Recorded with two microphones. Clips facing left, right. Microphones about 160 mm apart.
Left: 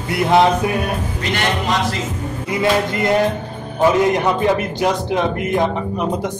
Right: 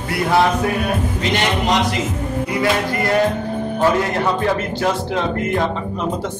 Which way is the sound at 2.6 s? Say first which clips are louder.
Left 3 dB; 20° left (ahead or behind).